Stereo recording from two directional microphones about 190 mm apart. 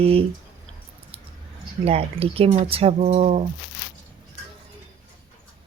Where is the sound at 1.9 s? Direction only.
30° right (ahead or behind).